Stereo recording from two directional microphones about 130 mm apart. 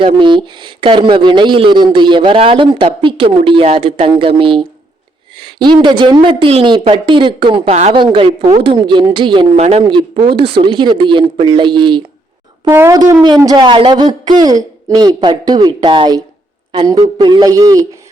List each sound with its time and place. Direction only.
0.0 s speech: 40° right (ahead or behind)
7.7 s a woman's voice: 55° right (ahead or behind)
7.9 s speech: 40° right (ahead or behind)
9.6 s a woman's voice: 55° right (ahead or behind)
9.8 s speech: 40° right (ahead or behind)
12.7 s speech: 20° right (ahead or behind)
13.2 s speech: 30° right (ahead or behind)